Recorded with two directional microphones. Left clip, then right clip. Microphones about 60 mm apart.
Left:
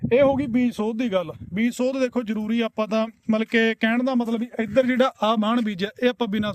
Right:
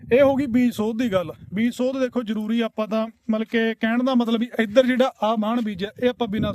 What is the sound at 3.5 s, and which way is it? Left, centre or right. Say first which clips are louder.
Speech: left 2 dB; left.